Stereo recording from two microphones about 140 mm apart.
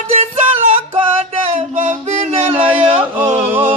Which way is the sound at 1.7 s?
65° right (ahead or behind).